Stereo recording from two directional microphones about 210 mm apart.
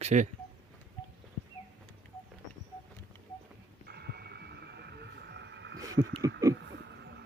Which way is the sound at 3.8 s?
50° right (ahead or behind).